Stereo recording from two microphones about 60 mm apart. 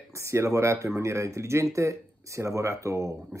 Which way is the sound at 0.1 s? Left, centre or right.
Right.